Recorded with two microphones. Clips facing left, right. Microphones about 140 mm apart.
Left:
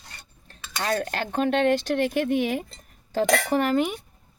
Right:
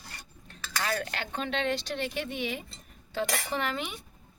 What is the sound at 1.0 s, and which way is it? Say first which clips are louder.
Speech: left 9 dB; 45° left (ahead or behind).